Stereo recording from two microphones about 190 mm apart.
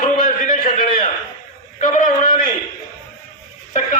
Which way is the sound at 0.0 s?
45° left (ahead or behind).